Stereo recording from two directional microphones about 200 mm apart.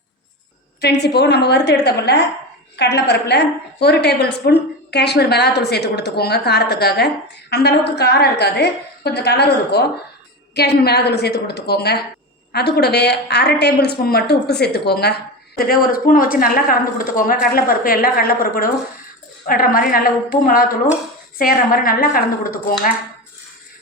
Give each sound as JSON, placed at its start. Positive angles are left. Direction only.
{"t": 0.8, "sound": "a woman's voice", "side_deg": 55}